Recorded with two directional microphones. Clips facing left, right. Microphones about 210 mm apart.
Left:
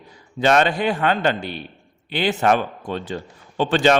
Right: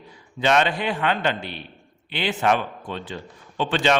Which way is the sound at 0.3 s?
45° left (ahead or behind).